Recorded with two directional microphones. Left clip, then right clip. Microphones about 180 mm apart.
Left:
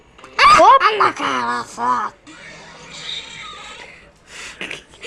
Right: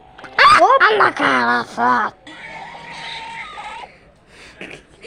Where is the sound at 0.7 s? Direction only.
60° right (ahead or behind).